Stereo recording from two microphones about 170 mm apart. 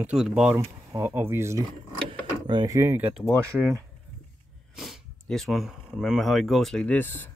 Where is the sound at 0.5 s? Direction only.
15° right (ahead or behind).